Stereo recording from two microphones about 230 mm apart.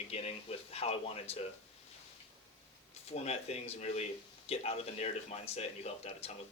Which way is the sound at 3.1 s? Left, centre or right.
Left.